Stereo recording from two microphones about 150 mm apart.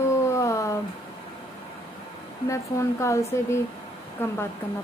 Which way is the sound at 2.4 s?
20° left (ahead or behind).